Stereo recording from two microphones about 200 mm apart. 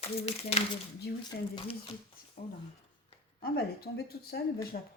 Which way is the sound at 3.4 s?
50° left (ahead or behind).